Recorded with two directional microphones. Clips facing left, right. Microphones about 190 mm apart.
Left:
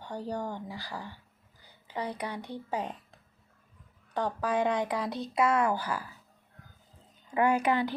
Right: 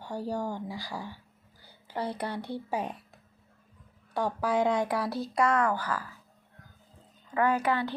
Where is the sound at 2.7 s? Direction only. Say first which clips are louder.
Even; 10° right (ahead or behind).